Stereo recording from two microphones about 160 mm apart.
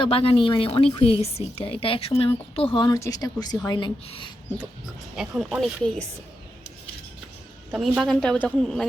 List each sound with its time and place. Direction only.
0.0 s a woman's voice: 35° left (ahead or behind)
5.1 s a woman's voice: 5° right (ahead or behind)
7.7 s a woman's voice: 5° right (ahead or behind)